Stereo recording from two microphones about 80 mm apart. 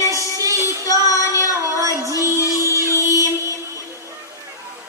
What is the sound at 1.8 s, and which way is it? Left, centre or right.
Music, right.